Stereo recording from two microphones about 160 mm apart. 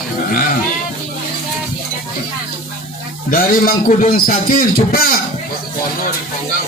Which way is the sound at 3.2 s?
60° left (ahead or behind).